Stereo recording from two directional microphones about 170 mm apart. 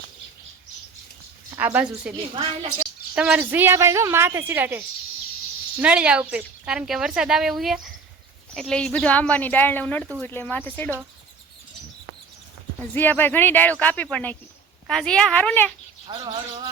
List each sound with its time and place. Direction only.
1.5 s a woman's voice: 10° right (ahead or behind)
2.3 s a woman's voice: 35° right (ahead or behind)
3.2 s a woman's voice: 10° right (ahead or behind)
5.8 s a woman's voice: 5° right (ahead or behind); by 10.9 s 10° left (ahead or behind)
12.9 s speech: 10° left (ahead or behind)
16.0 s speech: 25° right (ahead or behind)